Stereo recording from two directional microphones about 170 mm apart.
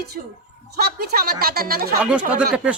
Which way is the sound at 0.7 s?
65° right (ahead or behind).